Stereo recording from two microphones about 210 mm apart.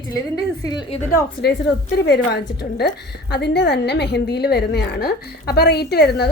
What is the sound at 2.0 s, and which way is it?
A woman's voice, 50° left (ahead or behind).